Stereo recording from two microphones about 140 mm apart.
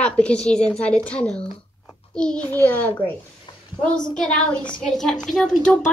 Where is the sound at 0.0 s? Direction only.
5° left (ahead or behind).